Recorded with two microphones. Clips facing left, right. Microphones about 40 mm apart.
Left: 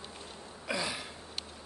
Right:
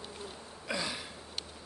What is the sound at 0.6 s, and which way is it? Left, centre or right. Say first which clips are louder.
Speech: left 1 dB; centre.